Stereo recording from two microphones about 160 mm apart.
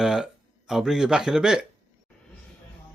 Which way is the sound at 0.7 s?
5° right (ahead or behind).